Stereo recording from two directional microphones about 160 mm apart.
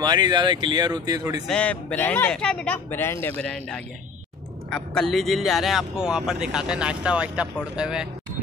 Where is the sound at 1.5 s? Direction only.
5° left (ahead or behind).